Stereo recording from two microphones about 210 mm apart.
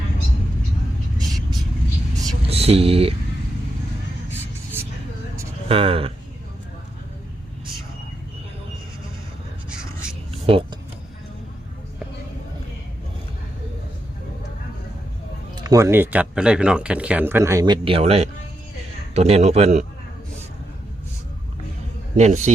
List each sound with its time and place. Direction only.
2.5 s speech: 30° right (ahead or behind)
4.8 s a sound: 10° right (ahead or behind)
5.6 s speech: 25° right (ahead or behind)
9.6 s a sound: 5° right (ahead or behind)
10.4 s speech: 25° right (ahead or behind)
15.6 s speech: 15° right (ahead or behind); by 19.8 s 30° right (ahead or behind)
22.2 s speech: 35° right (ahead or behind)